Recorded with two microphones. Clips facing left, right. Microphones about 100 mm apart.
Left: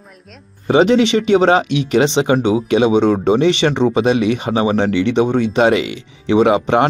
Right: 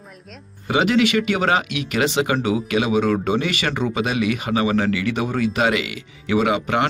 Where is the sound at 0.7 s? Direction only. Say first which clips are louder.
Left 6 dB; 30° left (ahead or behind).